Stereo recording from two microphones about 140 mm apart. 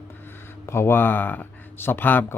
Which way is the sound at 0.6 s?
20° left (ahead or behind).